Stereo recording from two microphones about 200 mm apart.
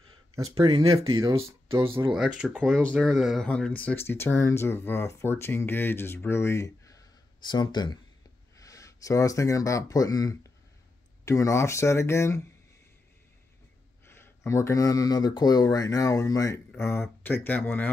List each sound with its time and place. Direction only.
0.6 s speech: 20° right (ahead or behind)
2.1 s speech: 5° right (ahead or behind); by 12.4 s 15° left (ahead or behind)
14.0 s speech: 10° left (ahead or behind)